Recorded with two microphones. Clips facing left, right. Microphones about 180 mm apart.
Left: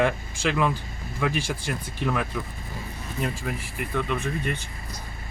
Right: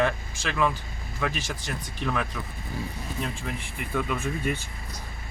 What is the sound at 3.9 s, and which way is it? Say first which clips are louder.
Speech: left 1 dB; 5° right (ahead or behind).